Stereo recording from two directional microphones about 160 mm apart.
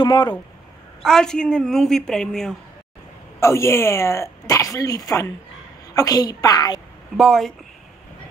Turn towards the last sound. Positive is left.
turn(degrees=0)  # may be behind; listen again after turning